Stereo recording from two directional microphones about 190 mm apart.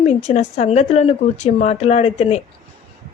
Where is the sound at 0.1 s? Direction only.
35° left (ahead or behind).